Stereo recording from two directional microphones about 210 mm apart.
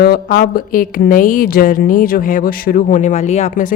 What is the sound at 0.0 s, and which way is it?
A woman's voice, 45° left (ahead or behind).